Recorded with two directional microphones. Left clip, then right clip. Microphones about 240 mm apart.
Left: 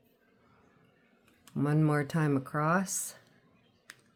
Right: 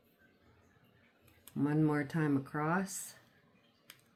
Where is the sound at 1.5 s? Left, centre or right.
Left.